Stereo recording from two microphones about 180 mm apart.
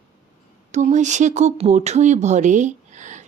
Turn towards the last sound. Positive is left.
turn(degrees=-40)  # may be behind; listen again after turning